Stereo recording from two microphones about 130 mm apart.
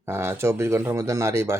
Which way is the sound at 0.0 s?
20° right (ahead or behind).